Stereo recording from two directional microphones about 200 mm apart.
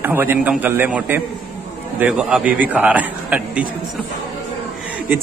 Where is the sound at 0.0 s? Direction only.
10° right (ahead or behind).